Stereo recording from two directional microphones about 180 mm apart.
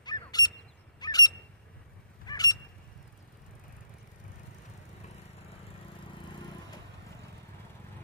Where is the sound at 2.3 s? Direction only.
20° left (ahead or behind).